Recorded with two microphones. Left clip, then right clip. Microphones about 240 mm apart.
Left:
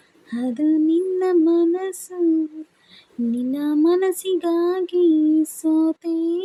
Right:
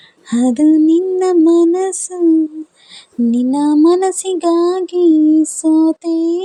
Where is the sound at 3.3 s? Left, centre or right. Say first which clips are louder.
Right 9 dB; right.